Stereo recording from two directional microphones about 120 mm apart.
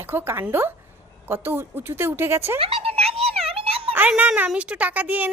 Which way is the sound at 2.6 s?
55° right (ahead or behind).